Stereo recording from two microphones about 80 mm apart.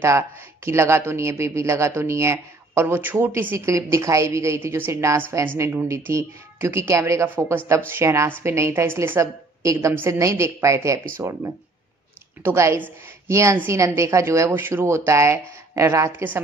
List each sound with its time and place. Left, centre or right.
0.7 s speech: right
4.6 s a woman's voice: right
5.3 s speech: right
9.6 s speech: right
14.5 s speech: right